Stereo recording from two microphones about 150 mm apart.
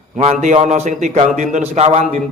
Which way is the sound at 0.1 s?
50° right (ahead or behind).